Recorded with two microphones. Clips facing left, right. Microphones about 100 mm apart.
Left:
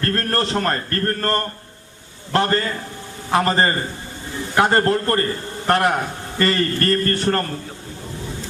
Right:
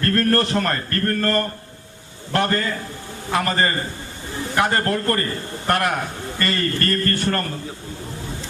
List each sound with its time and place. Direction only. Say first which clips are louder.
0.0 s a man's voice: right 3 dB; 30° left (ahead or behind)